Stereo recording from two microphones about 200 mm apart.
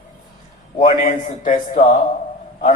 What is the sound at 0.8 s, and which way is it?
A man's voice, 35° left (ahead or behind).